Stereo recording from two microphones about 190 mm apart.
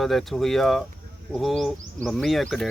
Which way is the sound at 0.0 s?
Centre (ahead or behind).